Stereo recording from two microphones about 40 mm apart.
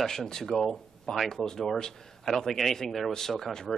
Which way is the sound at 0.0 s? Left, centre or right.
Centre.